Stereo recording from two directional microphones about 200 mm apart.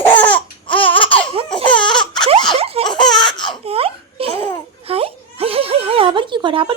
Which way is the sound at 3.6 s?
30° right (ahead or behind).